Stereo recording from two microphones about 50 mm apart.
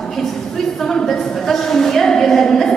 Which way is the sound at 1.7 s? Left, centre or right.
Centre.